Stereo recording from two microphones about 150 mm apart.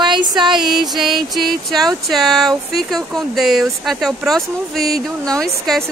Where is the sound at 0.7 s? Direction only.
Centre (ahead or behind).